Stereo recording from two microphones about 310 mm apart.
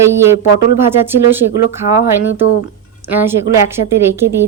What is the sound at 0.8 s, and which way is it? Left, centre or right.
Speech, centre.